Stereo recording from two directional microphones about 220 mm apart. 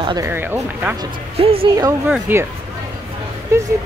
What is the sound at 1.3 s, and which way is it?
Speech, 25° right (ahead or behind).